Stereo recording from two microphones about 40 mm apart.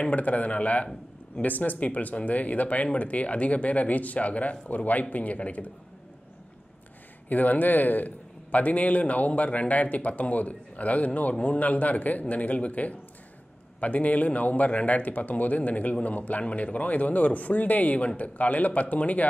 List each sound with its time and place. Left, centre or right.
0.0 s a man's voice: left
7.2 s a man's voice: left